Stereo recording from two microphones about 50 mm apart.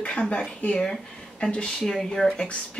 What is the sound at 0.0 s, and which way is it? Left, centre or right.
A woman's voice, left.